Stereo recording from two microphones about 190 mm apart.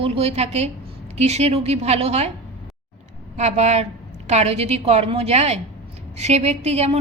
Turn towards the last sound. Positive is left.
turn(degrees=-35)  # may be behind; listen again after turning